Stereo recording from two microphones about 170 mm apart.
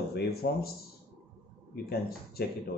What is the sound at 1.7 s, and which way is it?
Speech, 65° left (ahead or behind).